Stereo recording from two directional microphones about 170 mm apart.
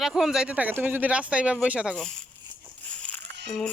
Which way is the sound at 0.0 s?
Centre (ahead or behind).